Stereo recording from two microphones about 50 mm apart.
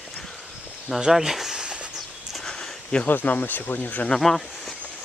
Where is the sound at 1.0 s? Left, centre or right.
Centre.